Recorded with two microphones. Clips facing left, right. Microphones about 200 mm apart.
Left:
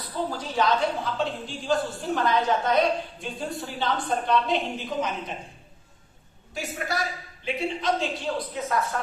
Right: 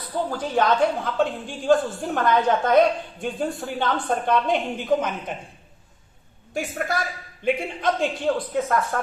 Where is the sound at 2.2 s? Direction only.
50° right (ahead or behind).